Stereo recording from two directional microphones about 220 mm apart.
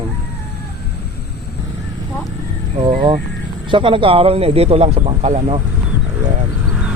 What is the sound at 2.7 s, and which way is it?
Speech, 25° right (ahead or behind).